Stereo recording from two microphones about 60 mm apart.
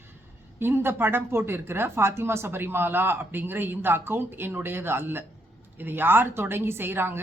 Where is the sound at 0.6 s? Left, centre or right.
Right.